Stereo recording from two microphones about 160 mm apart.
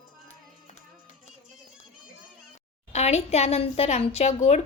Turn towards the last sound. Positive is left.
turn(degrees=45)  # may be behind; listen again after turning